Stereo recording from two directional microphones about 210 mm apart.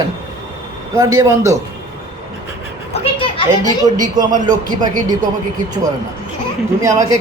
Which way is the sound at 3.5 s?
15° right (ahead or behind).